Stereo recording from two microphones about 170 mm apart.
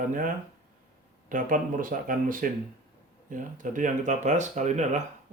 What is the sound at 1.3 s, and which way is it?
Speech, 50° right (ahead or behind).